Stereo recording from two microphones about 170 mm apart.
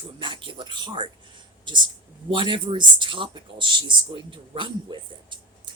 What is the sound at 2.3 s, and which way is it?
Speech, 30° right (ahead or behind).